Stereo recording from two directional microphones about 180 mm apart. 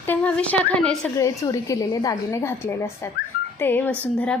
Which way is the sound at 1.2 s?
15° left (ahead or behind).